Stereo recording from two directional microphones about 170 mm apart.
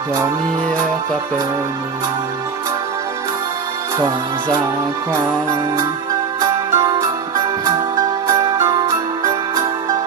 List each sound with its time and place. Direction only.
5.1 s music: 20° right (ahead or behind)